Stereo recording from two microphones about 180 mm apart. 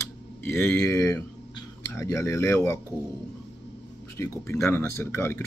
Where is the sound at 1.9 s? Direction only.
15° left (ahead or behind).